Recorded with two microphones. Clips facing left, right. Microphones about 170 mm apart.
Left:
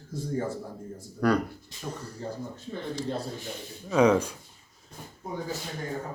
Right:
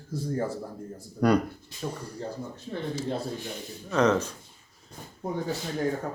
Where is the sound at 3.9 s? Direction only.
10° left (ahead or behind).